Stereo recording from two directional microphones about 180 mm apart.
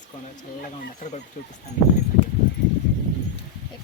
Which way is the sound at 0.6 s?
40° left (ahead or behind).